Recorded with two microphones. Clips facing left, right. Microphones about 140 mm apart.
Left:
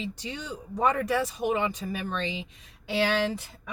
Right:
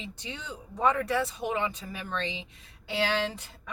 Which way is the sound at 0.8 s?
15° left (ahead or behind).